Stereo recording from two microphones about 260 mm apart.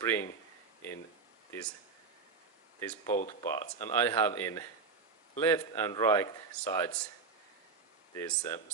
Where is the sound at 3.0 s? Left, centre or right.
Left.